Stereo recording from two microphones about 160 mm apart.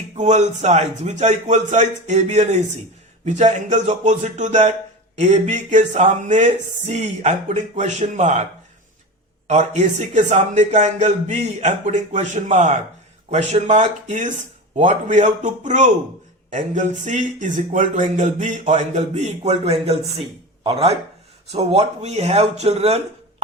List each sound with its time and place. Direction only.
0.2 s speech: 45° right (ahead or behind)
9.5 s speech: 45° right (ahead or behind)